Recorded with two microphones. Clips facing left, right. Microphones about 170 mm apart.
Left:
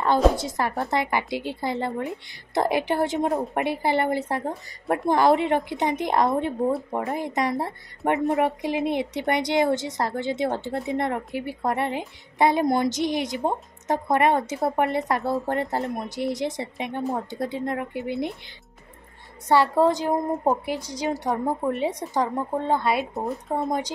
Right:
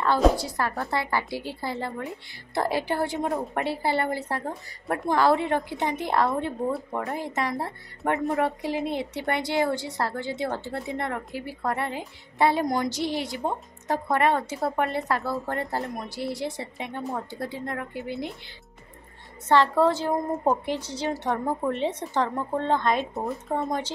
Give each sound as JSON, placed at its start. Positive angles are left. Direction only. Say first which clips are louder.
{"t": 0.4, "sound": "a woman's voice", "louder": "left 2 dB", "side_deg": 20}
{"t": 12.6, "sound": "a woman's voice", "louder": "left 4 dB", "side_deg": 30}
{"t": 19.4, "sound": "a woman's voice", "louder": "left 1 dB", "side_deg": 10}